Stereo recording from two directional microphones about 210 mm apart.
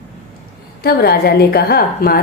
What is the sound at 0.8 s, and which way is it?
A woman's voice, 50° left (ahead or behind).